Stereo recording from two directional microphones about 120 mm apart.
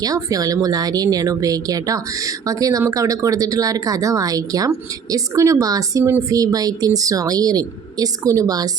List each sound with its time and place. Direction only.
0.0 s speech: 30° right (ahead or behind)